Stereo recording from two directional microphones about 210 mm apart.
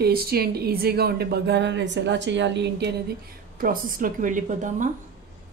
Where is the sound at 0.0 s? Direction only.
45° right (ahead or behind).